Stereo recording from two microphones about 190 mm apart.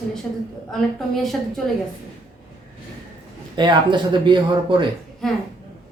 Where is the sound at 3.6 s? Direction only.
25° right (ahead or behind).